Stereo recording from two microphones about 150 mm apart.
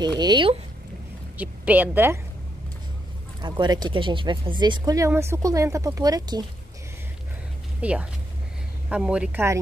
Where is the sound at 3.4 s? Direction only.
30° right (ahead or behind).